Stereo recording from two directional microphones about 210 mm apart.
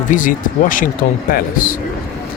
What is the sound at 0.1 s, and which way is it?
Speech, 40° left (ahead or behind).